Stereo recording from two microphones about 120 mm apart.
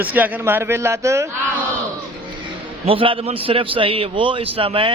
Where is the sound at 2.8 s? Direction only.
50° right (ahead or behind).